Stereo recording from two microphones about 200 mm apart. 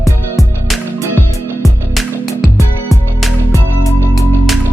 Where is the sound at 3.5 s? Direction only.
15° left (ahead or behind).